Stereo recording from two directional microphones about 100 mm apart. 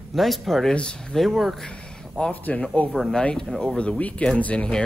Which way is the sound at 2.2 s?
15° left (ahead or behind).